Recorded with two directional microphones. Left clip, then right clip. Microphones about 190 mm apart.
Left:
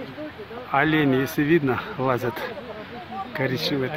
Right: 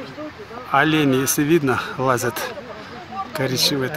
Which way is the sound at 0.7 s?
5° right (ahead or behind).